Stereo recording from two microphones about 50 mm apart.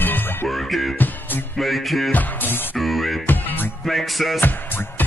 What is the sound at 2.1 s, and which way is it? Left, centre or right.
Music, left.